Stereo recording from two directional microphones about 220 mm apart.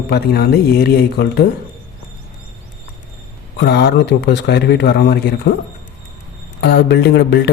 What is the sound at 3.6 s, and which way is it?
A man's voice, 45° left (ahead or behind).